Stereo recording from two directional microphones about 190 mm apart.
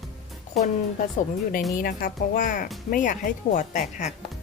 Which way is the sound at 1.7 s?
45° left (ahead or behind).